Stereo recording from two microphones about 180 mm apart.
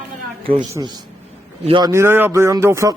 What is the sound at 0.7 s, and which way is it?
A man's voice, 25° right (ahead or behind).